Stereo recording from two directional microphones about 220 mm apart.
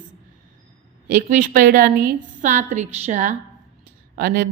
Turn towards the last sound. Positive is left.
turn(degrees=-45)  # may be behind; listen again after turning